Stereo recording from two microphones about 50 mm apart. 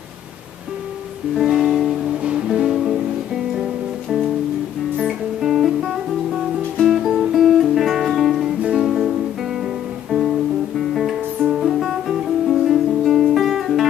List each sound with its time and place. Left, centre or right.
1.4 s music: centre
5.0 s guitar: centre
6.8 s music: centre
8.6 s music: centre
10.8 s music: centre
11.5 s guitar: centre